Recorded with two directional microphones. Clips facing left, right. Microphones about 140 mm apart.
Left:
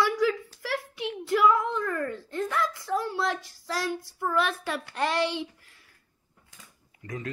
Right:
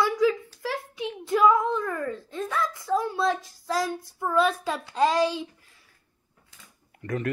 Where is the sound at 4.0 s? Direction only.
20° right (ahead or behind).